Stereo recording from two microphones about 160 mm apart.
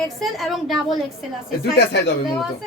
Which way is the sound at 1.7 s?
90° left.